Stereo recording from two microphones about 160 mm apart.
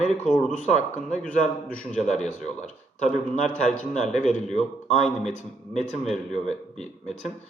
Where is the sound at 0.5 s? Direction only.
45° left (ahead or behind).